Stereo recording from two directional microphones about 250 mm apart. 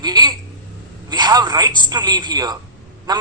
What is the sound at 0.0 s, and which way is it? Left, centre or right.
A woman's voice, centre.